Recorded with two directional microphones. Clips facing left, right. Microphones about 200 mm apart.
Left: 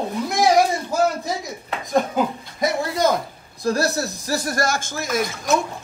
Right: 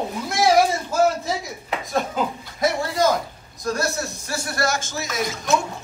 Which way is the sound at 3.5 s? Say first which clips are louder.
Left 4 dB; 35° left (ahead or behind).